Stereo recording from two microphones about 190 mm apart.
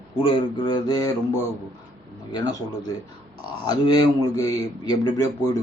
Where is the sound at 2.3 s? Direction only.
20° left (ahead or behind).